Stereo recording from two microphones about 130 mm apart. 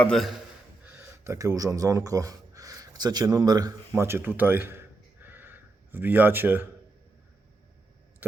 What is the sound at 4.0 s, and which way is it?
Speech, 20° right (ahead or behind).